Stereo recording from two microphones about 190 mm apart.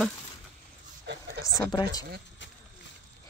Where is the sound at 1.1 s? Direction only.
60° right (ahead or behind).